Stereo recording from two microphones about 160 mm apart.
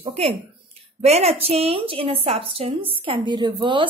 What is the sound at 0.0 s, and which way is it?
A woman's voice, 35° right (ahead or behind).